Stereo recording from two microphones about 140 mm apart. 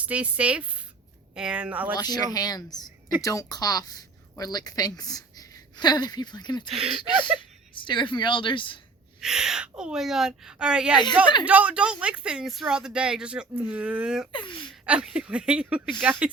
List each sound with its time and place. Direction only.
0.0 s speech: 10° right (ahead or behind)
2.0 s a woman's voice: 30° left (ahead or behind)
6.7 s speech: centre (ahead or behind)
7.3 s speech: 35° left (ahead or behind)
9.2 s speech: 5° right (ahead or behind)
14.3 s speech: 35° left (ahead or behind)
14.8 s speech: 5° right (ahead or behind)